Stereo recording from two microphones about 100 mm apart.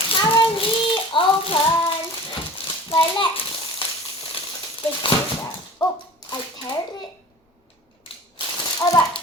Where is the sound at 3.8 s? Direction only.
60° left (ahead or behind).